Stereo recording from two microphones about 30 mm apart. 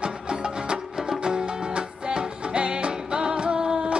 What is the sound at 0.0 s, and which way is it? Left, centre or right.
Music, right.